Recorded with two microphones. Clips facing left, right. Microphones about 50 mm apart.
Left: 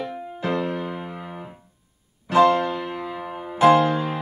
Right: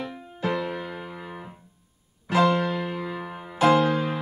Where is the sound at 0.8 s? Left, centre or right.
Centre.